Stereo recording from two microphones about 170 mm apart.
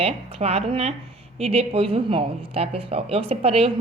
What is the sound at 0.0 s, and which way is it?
A woman's voice, 35° right (ahead or behind).